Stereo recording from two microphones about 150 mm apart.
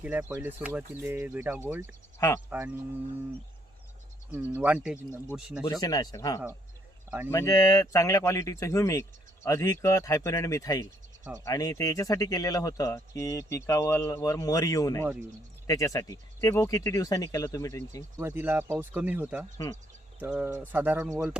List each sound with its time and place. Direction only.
0.0 s speech: 10° right (ahead or behind)
2.1 s speech: 15° left (ahead or behind)
2.5 s speech: 10° right (ahead or behind)
4.3 s speech: 10° right (ahead or behind)
5.8 s speech: 25° left (ahead or behind)
18.2 s speech: 15° right (ahead or behind)